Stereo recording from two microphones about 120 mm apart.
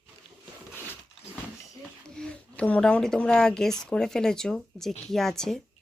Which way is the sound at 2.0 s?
5° left (ahead or behind).